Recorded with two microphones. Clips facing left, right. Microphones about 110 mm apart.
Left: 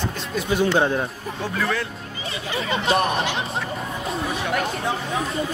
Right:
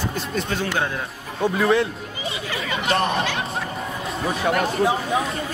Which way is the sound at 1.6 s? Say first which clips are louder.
Right 6 dB; 20° right (ahead or behind).